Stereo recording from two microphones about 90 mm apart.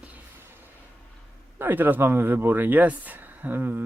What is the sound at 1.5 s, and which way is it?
Speech, 20° right (ahead or behind).